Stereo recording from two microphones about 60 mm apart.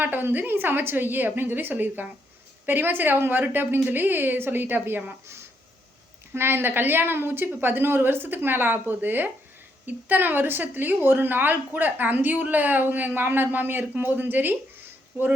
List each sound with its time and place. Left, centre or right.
0.0 s a woman's voice: right
6.3 s a woman's voice: right